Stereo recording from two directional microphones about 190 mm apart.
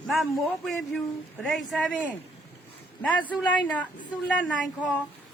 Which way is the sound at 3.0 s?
5° left (ahead or behind).